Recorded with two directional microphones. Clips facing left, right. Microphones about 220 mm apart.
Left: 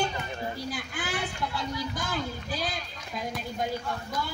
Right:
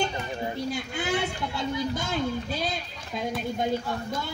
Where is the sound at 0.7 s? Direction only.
25° right (ahead or behind).